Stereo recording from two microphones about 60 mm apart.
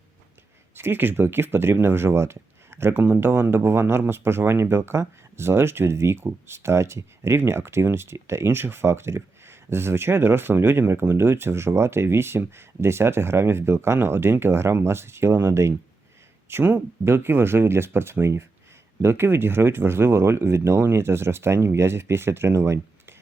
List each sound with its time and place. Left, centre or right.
0.8 s speech: right
2.9 s speech: right
16.5 s speech: right